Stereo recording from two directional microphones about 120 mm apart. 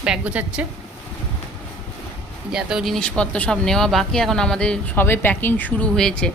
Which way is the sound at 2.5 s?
Centre (ahead or behind).